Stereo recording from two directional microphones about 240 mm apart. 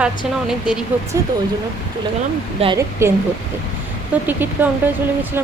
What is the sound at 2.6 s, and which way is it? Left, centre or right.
Speech, centre.